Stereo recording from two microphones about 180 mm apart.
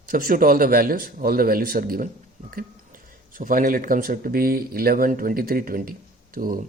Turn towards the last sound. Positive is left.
turn(degrees=-50)  # may be behind; listen again after turning